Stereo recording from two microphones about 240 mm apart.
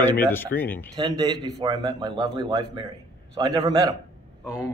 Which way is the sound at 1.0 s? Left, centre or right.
Centre.